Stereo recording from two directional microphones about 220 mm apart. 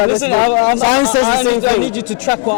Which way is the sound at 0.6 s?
20° left (ahead or behind).